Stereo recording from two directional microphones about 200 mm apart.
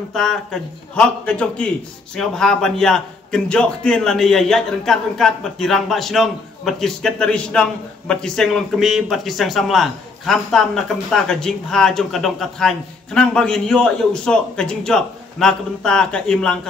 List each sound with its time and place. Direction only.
0.1 s a man's voice: centre (ahead or behind)